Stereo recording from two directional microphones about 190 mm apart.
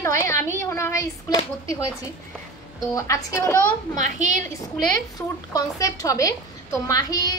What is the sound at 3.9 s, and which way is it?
Speech, 40° right (ahead or behind).